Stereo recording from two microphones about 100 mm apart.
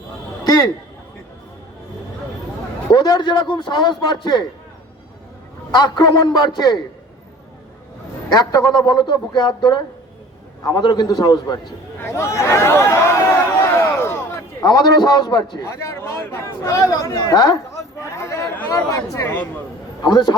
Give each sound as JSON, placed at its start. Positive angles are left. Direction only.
{"t": 2.9, "sound": "a man's voice", "side_deg": 45}
{"t": 5.7, "sound": "a man's voice", "side_deg": 45}
{"t": 8.3, "sound": "a man's voice", "side_deg": 40}
{"t": 11.9, "sound": "a sound", "side_deg": 25}
{"t": 14.6, "sound": "a man's voice", "side_deg": 40}
{"t": 15.6, "sound": "speech", "side_deg": 30}
{"t": 18.0, "sound": "a sound", "side_deg": 30}
{"t": 18.7, "sound": "a man's voice", "side_deg": 30}
{"t": 20.0, "sound": "a man's voice", "side_deg": 45}